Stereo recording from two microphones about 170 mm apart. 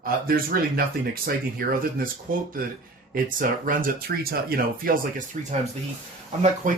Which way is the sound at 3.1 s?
55° right (ahead or behind).